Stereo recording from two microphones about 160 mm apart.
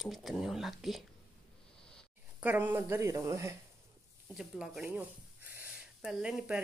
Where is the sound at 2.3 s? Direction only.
10° right (ahead or behind).